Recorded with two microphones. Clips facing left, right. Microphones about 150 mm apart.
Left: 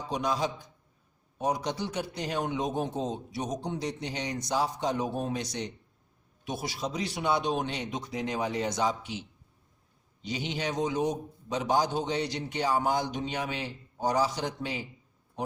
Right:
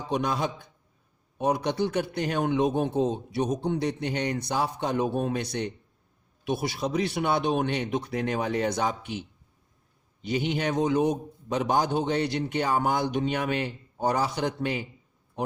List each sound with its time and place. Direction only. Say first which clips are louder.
0.1 s a man's voice: right 2 dB; 60° right (ahead or behind)
10.2 s a man's voice: right 6 dB; 55° right (ahead or behind)